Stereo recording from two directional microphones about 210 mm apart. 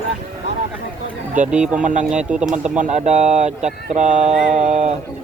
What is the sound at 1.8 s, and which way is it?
Speech, 35° right (ahead or behind).